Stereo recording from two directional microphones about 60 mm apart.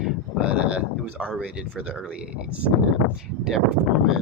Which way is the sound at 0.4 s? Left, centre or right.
Centre.